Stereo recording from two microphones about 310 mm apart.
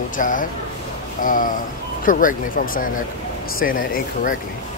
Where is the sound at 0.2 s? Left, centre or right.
Left.